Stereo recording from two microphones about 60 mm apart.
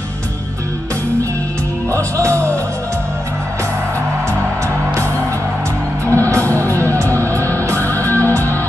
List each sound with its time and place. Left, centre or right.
1.9 s music: right
6.0 s music: left